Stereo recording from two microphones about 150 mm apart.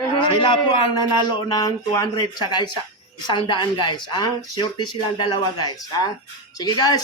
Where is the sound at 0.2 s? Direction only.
30° left (ahead or behind).